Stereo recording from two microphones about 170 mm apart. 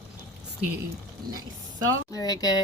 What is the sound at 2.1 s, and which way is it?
Speech, 20° left (ahead or behind).